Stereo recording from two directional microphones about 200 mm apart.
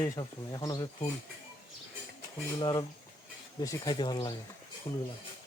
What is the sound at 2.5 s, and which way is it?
Speech, 25° left (ahead or behind).